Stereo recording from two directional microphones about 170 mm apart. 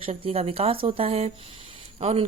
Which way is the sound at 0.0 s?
35° right (ahead or behind).